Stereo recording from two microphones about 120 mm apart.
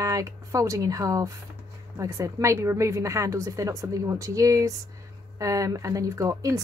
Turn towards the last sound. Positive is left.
turn(degrees=-30)  # may be behind; listen again after turning